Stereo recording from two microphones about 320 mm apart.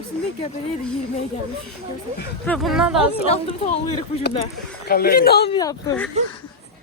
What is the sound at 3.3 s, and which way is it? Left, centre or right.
Speech, centre.